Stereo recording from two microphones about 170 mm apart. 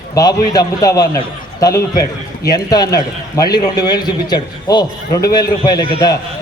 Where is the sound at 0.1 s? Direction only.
20° left (ahead or behind).